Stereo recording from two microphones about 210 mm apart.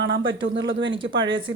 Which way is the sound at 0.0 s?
55° right (ahead or behind).